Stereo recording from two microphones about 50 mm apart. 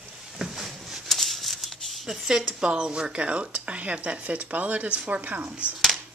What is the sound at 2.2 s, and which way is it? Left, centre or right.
Speech, centre.